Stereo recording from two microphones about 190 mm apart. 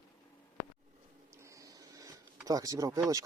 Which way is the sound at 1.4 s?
15° right (ahead or behind).